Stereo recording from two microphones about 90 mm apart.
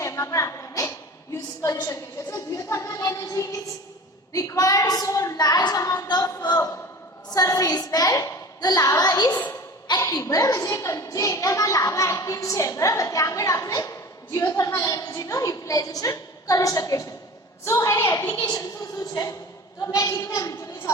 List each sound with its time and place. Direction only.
0.0 s a sound: 35° left (ahead or behind)
4.3 s a child's voice: 40° left (ahead or behind)
10.0 s a child's voice: 35° left (ahead or behind)
19.1 s a child's voice: 40° left (ahead or behind)